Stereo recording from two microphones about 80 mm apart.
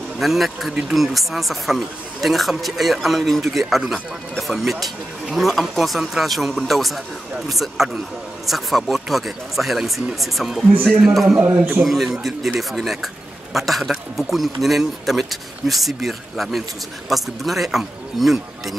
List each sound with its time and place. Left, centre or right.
0.2 s a man's voice: centre
11.4 s a man's voice: right
11.8 s speech: centre